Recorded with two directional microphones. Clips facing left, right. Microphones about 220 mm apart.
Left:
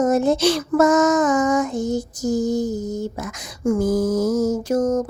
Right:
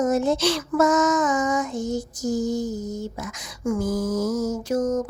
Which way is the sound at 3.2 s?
45° left (ahead or behind).